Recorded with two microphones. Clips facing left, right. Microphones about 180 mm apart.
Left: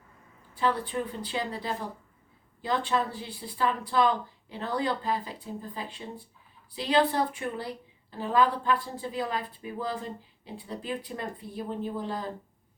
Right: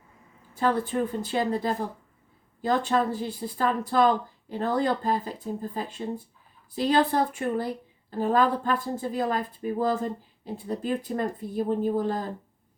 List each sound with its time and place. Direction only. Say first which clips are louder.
0.5 s a woman's voice: right 3 dB; 45° right (ahead or behind)